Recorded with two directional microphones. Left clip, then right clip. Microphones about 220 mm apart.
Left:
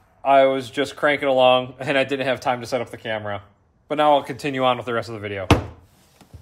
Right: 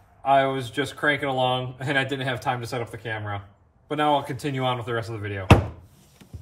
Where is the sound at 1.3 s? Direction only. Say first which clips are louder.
Left 8 dB; 25° left (ahead or behind).